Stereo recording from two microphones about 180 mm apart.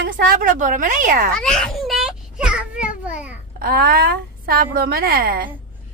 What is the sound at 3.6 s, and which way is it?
A woman's voice, 55° right (ahead or behind).